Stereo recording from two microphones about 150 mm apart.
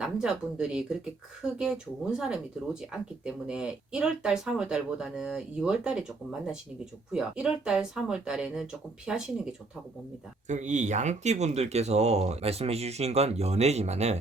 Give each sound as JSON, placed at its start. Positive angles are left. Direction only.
{"t": 0.0, "sound": "speech", "side_deg": -5}
{"t": 10.5, "sound": "speech", "side_deg": -55}